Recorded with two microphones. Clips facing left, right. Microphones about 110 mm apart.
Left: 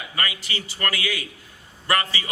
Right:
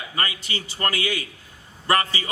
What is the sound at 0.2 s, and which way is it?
A man's voice, 30° right (ahead or behind).